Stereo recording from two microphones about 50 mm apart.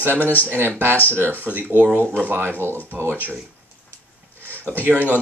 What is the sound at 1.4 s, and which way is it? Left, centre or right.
Speech, right.